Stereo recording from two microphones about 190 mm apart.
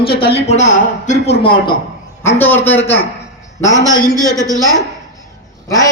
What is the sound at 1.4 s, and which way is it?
Speech, 25° left (ahead or behind).